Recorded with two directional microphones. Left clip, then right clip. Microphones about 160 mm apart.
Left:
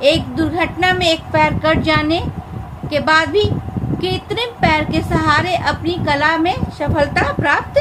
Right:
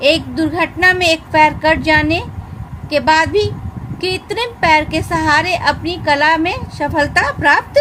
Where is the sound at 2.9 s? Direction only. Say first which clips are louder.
Right 2 dB; 40° right (ahead or behind).